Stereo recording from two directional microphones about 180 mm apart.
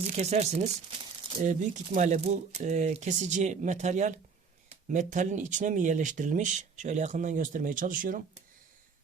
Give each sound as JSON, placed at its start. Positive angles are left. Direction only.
{"t": 0.2, "sound": "speech", "side_deg": -40}